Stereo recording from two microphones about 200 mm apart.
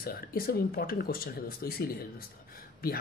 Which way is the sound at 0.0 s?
50° left (ahead or behind).